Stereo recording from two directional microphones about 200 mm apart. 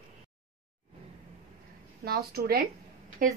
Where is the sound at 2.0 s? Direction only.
50° right (ahead or behind).